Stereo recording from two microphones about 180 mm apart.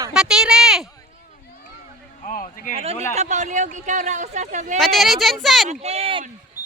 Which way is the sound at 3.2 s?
40° right (ahead or behind).